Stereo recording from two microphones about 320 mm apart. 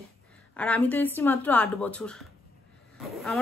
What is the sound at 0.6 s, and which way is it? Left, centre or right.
Speech, centre.